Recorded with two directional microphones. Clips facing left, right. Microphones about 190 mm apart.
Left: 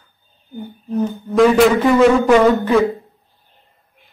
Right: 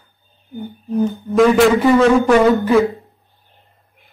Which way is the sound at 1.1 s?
Centre (ahead or behind).